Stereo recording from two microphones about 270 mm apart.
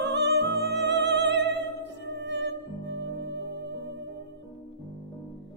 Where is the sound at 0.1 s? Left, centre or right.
Right.